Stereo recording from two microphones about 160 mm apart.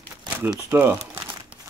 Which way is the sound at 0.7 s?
15° right (ahead or behind).